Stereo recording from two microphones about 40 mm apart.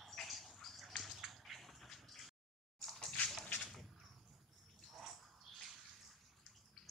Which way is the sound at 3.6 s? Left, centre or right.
Centre.